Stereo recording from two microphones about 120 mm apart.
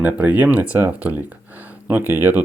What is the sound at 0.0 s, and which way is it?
Speech, 15° right (ahead or behind).